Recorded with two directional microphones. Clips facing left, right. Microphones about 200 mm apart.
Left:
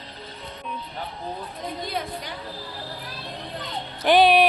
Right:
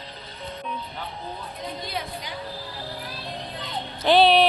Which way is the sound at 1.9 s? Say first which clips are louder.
Left 2 dB; 50° left (ahead or behind).